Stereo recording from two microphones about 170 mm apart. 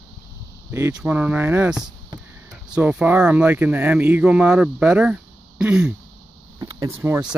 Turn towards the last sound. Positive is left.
turn(degrees=-15)  # may be behind; listen again after turning